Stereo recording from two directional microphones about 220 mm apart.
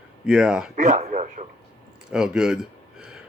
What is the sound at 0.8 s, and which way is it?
Speech, 35° right (ahead or behind).